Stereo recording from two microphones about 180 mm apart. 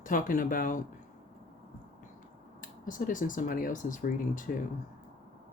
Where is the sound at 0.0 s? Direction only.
50° left (ahead or behind).